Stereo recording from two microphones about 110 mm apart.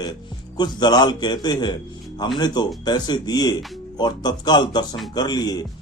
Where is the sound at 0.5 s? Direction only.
40° left (ahead or behind).